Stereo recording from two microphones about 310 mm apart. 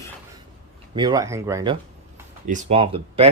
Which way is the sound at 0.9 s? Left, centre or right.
Centre.